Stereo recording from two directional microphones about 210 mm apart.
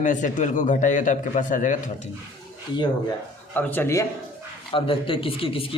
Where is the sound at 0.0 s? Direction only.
35° left (ahead or behind).